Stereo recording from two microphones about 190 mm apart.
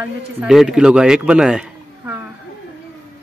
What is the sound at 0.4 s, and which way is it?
Speech, centre (ahead or behind).